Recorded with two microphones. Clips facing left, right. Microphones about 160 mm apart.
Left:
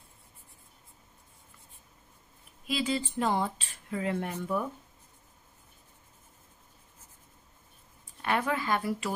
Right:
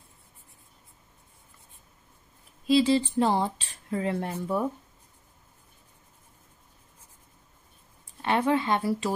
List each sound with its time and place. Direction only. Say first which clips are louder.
2.6 s speech: right 9 dB; 30° right (ahead or behind)
8.2 s speech: right 5 dB; 25° right (ahead or behind)